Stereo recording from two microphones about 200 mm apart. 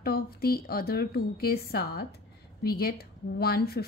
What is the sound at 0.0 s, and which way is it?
A woman's voice, 50° left (ahead or behind).